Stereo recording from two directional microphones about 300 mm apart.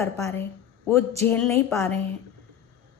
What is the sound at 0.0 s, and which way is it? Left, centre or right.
A woman's voice, centre.